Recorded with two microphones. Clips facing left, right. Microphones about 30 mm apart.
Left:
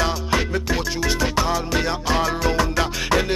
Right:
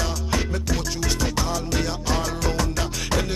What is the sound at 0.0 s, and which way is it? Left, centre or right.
Music, left.